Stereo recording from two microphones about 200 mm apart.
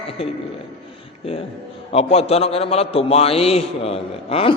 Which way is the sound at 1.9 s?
30° left (ahead or behind).